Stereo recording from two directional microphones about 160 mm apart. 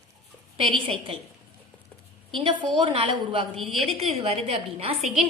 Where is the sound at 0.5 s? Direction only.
35° right (ahead or behind).